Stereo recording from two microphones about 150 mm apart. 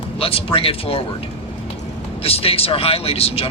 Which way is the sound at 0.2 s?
40° left (ahead or behind).